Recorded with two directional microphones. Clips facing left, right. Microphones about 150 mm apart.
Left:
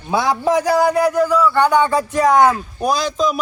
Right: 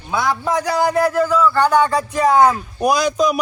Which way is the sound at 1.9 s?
Centre (ahead or behind).